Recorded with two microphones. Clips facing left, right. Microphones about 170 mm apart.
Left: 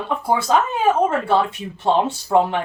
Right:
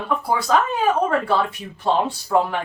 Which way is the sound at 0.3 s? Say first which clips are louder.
Left 2 dB; 25° left (ahead or behind).